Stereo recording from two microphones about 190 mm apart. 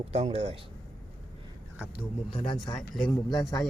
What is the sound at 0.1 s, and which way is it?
Speech, 35° right (ahead or behind).